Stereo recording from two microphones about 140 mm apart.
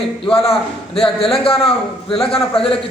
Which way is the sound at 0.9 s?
45° left (ahead or behind).